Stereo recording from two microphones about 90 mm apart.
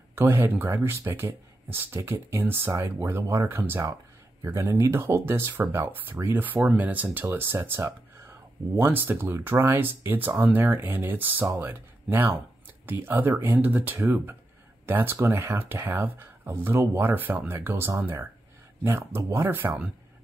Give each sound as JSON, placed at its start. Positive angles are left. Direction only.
{"t": 0.1, "sound": "speech", "side_deg": -25}